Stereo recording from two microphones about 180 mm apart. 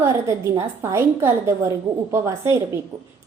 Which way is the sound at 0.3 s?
20° right (ahead or behind).